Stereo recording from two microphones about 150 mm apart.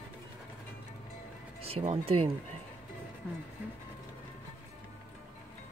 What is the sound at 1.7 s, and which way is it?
Speech, 45° right (ahead or behind).